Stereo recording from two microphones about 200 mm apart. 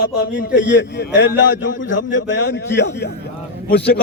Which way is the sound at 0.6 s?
60° left (ahead or behind).